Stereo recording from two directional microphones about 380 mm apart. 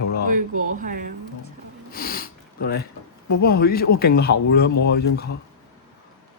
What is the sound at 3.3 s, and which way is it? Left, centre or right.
Speech, left.